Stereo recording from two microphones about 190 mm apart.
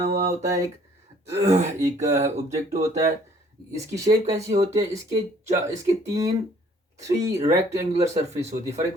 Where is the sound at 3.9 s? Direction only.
20° right (ahead or behind).